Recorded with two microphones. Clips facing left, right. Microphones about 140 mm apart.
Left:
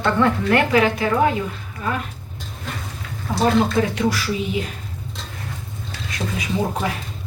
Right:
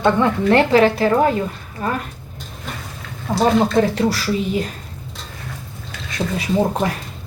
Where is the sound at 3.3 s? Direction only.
30° right (ahead or behind).